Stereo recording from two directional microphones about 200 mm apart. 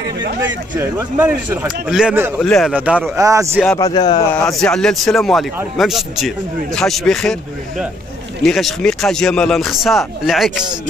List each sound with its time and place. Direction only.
0.5 s speech: 10° right (ahead or behind)
2.4 s a man's voice: 5° left (ahead or behind); by 3.6 s 15° right (ahead or behind)
3.7 s speech: 20° left (ahead or behind)
4.3 s a man's voice: centre (ahead or behind)
8.5 s a man's voice: centre (ahead or behind)